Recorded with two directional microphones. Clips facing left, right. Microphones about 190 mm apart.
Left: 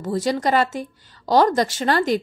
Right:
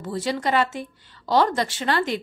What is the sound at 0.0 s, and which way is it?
A woman's voice, 40° left (ahead or behind).